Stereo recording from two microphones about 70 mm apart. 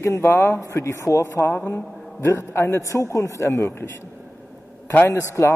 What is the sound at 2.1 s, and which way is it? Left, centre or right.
Speech, left.